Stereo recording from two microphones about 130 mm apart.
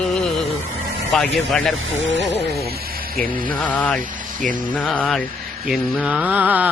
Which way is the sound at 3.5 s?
10° left (ahead or behind).